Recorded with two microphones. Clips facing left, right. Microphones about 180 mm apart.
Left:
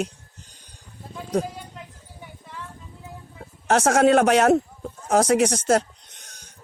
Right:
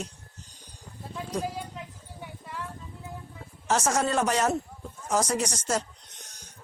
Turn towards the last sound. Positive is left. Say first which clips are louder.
# left 9 dB
turn(degrees=65)  # may be behind; listen again after turning